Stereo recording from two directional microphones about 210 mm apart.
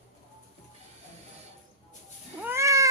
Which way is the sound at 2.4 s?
10° right (ahead or behind).